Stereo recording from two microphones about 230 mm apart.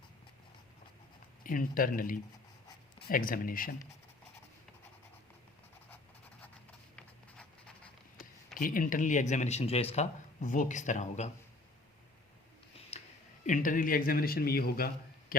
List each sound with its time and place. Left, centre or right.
1.5 s speech: left
6.9 s a sound: centre
8.5 s speech: left
13.4 s speech: left